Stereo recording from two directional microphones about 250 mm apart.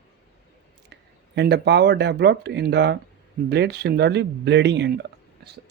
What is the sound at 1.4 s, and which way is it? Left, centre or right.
Speech, right.